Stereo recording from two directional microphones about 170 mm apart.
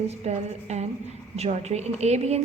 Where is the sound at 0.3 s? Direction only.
40° right (ahead or behind).